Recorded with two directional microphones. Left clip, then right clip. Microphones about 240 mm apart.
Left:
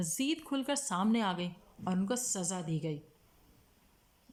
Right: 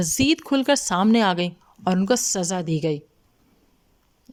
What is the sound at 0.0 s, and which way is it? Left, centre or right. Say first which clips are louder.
A woman's voice: right 14 dB; right.